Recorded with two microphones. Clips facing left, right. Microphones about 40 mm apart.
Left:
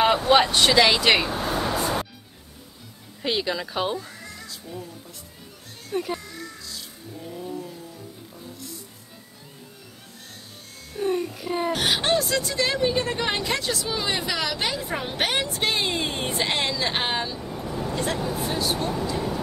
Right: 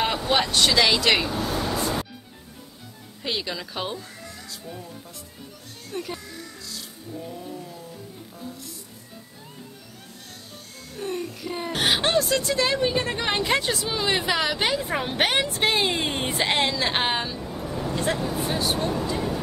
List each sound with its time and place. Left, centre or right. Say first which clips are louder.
0.0 s speech: left 5 dB; centre
1.3 s vehicle: left 1 dB; left
3.2 s speech: left 4 dB; centre
5.9 s music: left 5 dB; centre
11.0 s music: left 5 dB; centre
11.7 s speech: right 3 dB; centre
17.4 s vehicle: even; centre
18.1 s speech: even; centre
18.4 s speech: right 1 dB; centre